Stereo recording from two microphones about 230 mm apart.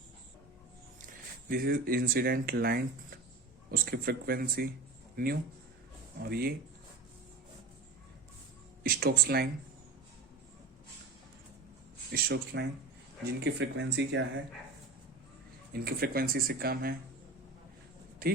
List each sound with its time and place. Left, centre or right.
1.5 s speech: right
8.8 s speech: right
12.1 s speech: right
15.7 s speech: right
18.2 s speech: right